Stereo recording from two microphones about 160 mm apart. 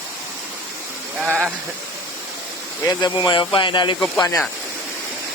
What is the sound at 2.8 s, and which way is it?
Speech, 25° left (ahead or behind).